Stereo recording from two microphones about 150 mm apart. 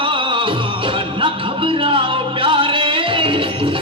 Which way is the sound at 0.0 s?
35° right (ahead or behind).